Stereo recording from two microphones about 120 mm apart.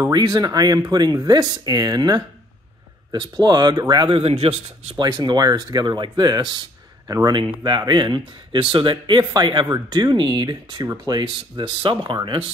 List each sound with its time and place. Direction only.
0.1 s speech: 35° right (ahead or behind)
4.1 s speech: 55° right (ahead or behind)
5.0 s speech: 35° right (ahead or behind)